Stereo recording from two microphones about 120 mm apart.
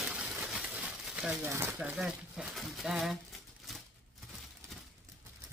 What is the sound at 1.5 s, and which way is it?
Speech, 20° right (ahead or behind).